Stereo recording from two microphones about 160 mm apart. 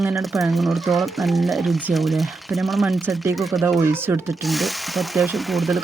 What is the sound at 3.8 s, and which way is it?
Speech, 15° right (ahead or behind).